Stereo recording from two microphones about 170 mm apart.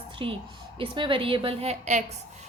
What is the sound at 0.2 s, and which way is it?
A woman's voice, 30° right (ahead or behind).